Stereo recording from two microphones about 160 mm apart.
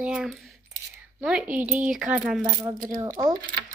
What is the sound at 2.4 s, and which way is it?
Speech, 25° right (ahead or behind).